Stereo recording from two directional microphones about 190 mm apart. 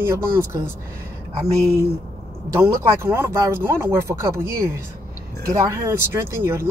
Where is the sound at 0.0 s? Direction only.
15° right (ahead or behind).